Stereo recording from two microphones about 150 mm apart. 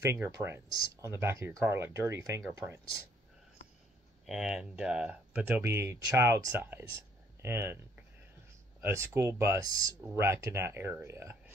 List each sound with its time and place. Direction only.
0.0 s speech: 15° right (ahead or behind)
4.3 s speech: 5° right (ahead or behind)
8.8 s speech: 20° right (ahead or behind)